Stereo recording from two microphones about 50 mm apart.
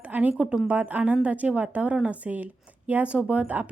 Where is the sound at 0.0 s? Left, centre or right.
Right.